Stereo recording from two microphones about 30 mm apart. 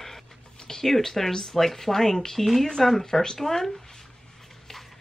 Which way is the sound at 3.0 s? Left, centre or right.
Centre.